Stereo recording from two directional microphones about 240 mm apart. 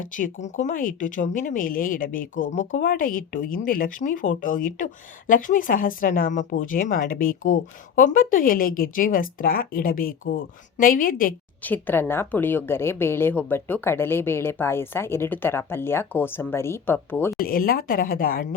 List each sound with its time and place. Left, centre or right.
0.0 s a woman's voice: left
11.6 s a woman's voice: centre
17.3 s a woman's voice: left